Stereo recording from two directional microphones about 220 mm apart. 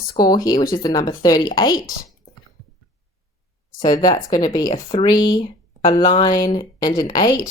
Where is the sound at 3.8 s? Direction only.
20° left (ahead or behind).